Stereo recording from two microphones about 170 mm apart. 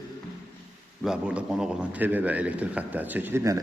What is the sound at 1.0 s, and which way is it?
A man's voice, 5° right (ahead or behind).